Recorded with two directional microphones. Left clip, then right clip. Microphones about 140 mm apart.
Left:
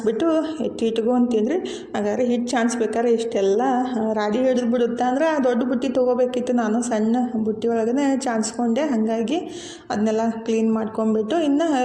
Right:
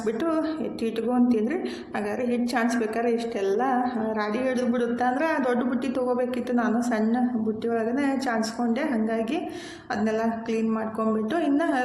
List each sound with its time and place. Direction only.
0.0 s a woman's voice: 35° left (ahead or behind)